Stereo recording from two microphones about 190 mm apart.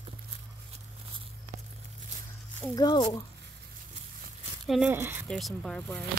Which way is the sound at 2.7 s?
20° left (ahead or behind).